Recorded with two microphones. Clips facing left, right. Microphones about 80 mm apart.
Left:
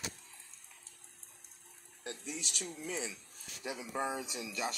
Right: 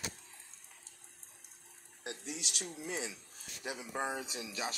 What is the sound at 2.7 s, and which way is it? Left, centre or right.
Speech, right.